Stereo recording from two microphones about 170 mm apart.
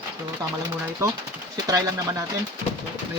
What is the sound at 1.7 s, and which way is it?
Speech, 20° right (ahead or behind).